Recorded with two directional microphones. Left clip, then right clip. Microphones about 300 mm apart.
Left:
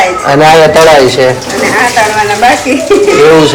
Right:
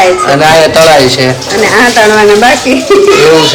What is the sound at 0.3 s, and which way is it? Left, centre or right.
A man's voice, centre.